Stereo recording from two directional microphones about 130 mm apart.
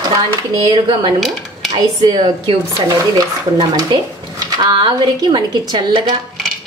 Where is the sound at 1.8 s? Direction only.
35° right (ahead or behind).